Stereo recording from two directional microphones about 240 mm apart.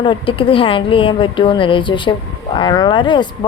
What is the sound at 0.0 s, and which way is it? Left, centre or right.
A woman's voice, left.